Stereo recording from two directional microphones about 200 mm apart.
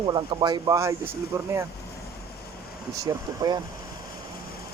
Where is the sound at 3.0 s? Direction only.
20° right (ahead or behind).